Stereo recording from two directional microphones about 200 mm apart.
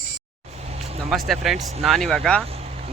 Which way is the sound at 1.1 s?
Centre (ahead or behind).